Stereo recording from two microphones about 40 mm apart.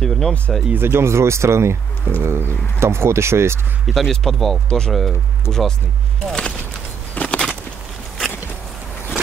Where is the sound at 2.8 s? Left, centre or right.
Right.